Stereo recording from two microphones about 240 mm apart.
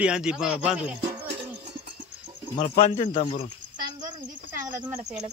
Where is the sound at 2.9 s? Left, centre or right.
Left.